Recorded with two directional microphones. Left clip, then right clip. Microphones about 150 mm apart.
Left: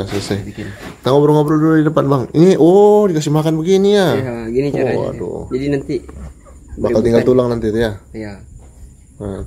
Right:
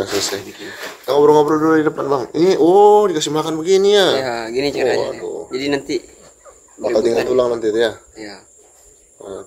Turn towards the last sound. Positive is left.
turn(degrees=15)  # may be behind; listen again after turning